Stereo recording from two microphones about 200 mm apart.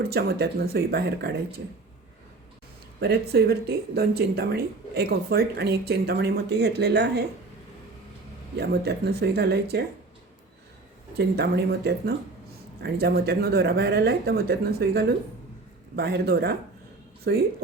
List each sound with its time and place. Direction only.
0.0 s speech: 55° right (ahead or behind)
3.0 s speech: 55° right (ahead or behind)
8.5 s speech: 55° right (ahead or behind)
11.2 s speech: 55° right (ahead or behind)